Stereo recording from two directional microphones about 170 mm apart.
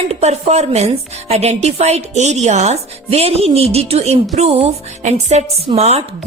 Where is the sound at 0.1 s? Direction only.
40° right (ahead or behind).